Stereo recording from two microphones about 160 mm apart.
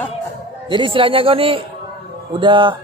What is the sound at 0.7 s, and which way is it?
A man's voice, 30° right (ahead or behind).